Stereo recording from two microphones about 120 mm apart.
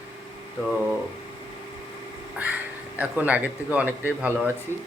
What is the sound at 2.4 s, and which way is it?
Speech, 10° right (ahead or behind).